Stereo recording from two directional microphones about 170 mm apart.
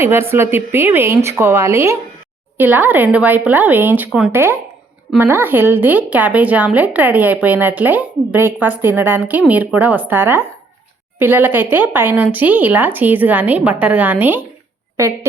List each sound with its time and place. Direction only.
0.0 s speech: 15° right (ahead or behind)